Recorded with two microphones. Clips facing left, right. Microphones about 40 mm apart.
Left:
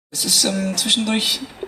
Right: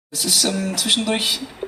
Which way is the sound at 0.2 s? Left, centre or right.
Centre.